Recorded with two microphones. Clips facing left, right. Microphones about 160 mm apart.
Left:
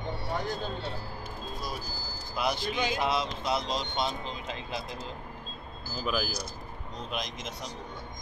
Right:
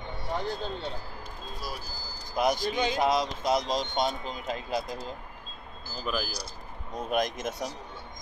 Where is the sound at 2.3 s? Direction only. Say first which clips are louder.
Right 4 dB; 45° right (ahead or behind).